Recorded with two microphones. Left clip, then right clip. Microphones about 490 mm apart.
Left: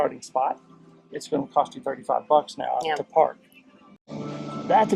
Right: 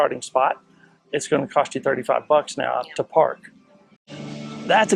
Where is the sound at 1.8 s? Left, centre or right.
Right.